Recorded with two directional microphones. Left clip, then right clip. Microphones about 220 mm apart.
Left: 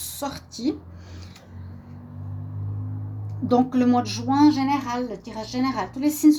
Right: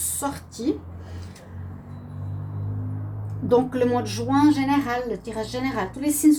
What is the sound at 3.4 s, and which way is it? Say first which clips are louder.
A woman's voice: right 1 dB; 45° left (ahead or behind).